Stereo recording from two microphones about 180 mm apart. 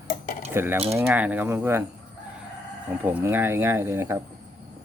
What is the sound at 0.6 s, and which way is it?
Speech, 15° right (ahead or behind).